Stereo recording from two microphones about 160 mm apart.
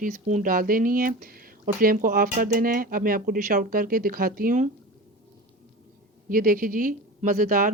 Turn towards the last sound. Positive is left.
turn(degrees=-55)  # may be behind; listen again after turning